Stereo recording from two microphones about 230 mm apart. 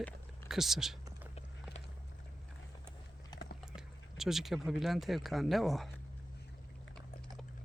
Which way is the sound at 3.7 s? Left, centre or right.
Centre.